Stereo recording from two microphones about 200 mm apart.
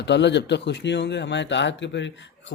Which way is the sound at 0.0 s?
60° left (ahead or behind).